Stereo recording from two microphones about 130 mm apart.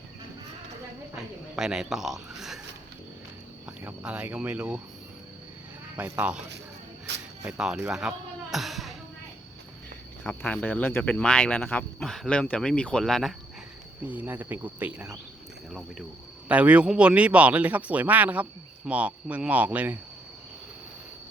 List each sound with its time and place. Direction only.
1.1 s speech: 5° right (ahead or behind)
3.8 s speech: 10° right (ahead or behind)
6.1 s speech: 10° right (ahead or behind)
7.4 s speech: 5° right (ahead or behind)
7.9 s a sound: 5° right (ahead or behind)
10.2 s speech: 10° left (ahead or behind)
14.1 s speech: 15° right (ahead or behind)
16.5 s speech: 10° right (ahead or behind)